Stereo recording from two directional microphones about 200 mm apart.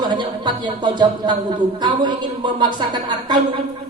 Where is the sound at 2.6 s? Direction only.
20° right (ahead or behind).